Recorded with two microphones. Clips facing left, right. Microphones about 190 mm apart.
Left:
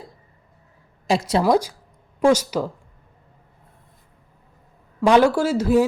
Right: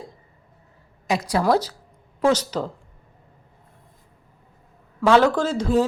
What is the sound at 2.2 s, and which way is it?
Speech, 10° left (ahead or behind).